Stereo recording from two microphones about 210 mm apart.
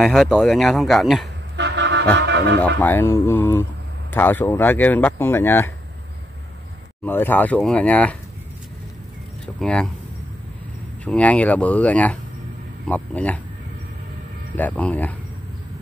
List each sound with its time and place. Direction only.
0.0 s speech: centre (ahead or behind)
1.6 s vehicle: 60° right (ahead or behind)
2.1 s music: 55° right (ahead or behind)
2.8 s speech: 10° left (ahead or behind)
7.1 s speech: 10° left (ahead or behind)
9.6 s speech: 5° left (ahead or behind)
11.1 s speech: 5° left (ahead or behind)
14.6 s speech: 5° left (ahead or behind)